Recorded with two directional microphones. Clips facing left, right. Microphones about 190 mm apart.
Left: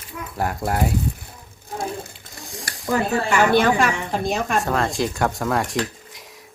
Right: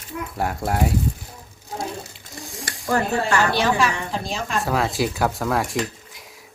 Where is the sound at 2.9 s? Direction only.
20° left (ahead or behind).